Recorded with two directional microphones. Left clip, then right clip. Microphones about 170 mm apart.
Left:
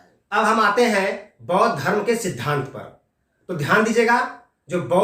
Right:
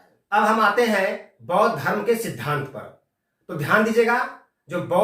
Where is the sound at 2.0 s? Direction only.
20° left (ahead or behind).